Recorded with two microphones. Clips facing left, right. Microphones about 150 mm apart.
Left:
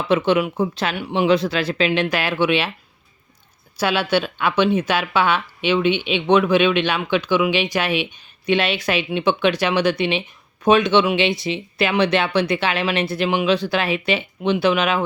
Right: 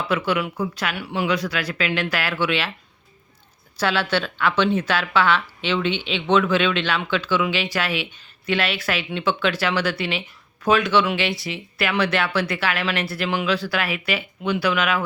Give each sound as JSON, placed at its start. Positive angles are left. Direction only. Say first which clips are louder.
{"t": 0.1, "sound": "speech", "louder": "left 7 dB", "side_deg": 20}
{"t": 3.8, "sound": "speech", "louder": "left 3 dB", "side_deg": 15}